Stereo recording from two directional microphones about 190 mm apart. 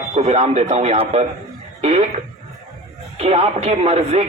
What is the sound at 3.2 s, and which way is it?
Speech, 35° right (ahead or behind).